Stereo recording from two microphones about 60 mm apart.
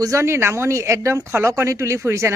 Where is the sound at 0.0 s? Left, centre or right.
Right.